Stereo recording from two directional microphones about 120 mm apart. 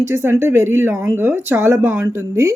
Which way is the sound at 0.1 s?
25° right (ahead or behind).